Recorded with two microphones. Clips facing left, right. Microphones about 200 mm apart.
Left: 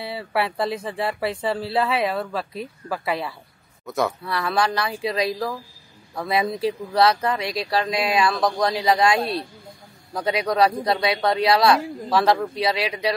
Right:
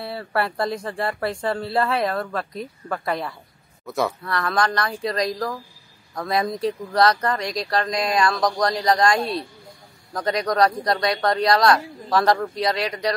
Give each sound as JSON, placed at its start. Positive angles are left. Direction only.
{"t": 0.0, "sound": "speech", "side_deg": 0}
{"t": 9.2, "sound": "speech", "side_deg": 30}
{"t": 10.1, "sound": "speech", "side_deg": 5}